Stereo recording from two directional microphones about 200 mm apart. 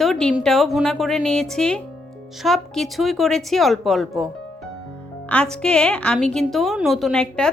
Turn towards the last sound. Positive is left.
turn(degrees=5)  # may be behind; listen again after turning